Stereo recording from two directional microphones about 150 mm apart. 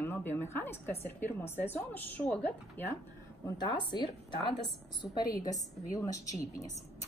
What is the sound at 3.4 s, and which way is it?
Speech, 30° left (ahead or behind).